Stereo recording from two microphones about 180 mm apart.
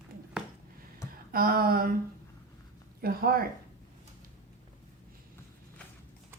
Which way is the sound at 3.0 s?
55° right (ahead or behind).